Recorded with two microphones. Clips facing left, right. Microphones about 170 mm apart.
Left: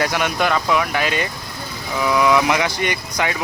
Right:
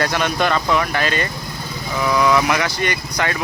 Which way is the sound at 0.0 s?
10° left (ahead or behind).